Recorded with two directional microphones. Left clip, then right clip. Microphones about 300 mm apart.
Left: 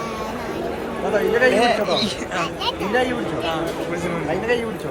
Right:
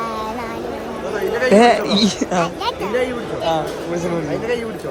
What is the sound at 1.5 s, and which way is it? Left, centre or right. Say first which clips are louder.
Speech: right 5 dB; right.